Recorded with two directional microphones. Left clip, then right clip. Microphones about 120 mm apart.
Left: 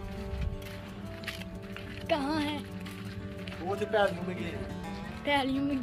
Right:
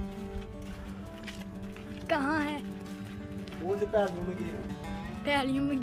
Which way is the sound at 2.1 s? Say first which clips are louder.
Right 1 dB; 20° right (ahead or behind).